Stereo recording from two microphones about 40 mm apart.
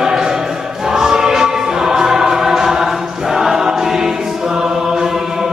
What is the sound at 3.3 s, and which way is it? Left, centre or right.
Choir, centre.